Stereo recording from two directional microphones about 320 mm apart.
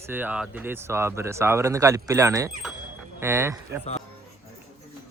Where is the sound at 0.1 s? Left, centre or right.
Centre.